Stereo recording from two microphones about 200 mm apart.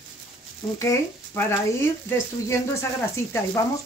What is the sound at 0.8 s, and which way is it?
Speech, 15° left (ahead or behind).